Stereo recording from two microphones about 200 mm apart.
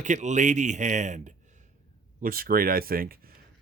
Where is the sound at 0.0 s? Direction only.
35° right (ahead or behind).